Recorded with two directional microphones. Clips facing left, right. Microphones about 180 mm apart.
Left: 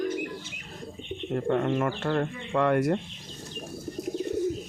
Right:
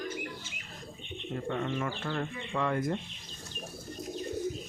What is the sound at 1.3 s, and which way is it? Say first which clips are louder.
Speech: left 8 dB; 55° left (ahead or behind).